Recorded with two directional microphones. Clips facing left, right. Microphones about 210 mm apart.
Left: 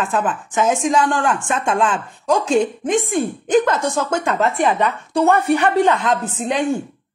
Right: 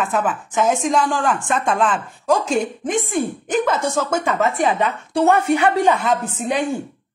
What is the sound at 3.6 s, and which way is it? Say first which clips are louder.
Speech: right 3 dB; 5° right (ahead or behind).